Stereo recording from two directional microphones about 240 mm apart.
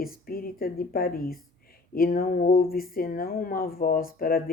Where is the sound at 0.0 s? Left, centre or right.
Left.